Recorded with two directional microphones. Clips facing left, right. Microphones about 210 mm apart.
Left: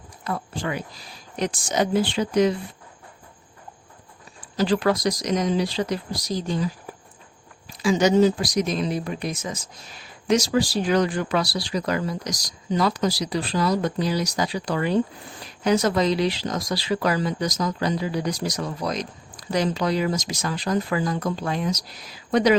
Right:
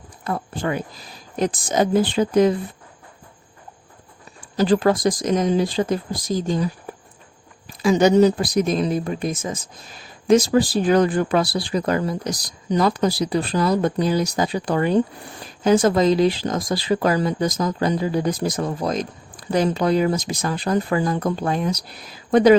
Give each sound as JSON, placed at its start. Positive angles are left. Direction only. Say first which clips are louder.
{"t": 0.3, "sound": "speech", "louder": "right 4 dB", "side_deg": -55}
{"t": 4.4, "sound": "speech", "louder": "right 4 dB", "side_deg": -45}
{"t": 7.7, "sound": "speech", "louder": "right 3 dB", "side_deg": -50}